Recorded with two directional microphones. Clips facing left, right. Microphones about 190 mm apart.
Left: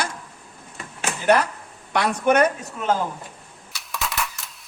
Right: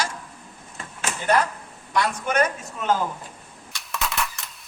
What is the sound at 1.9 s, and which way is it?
Speech, 60° left (ahead or behind).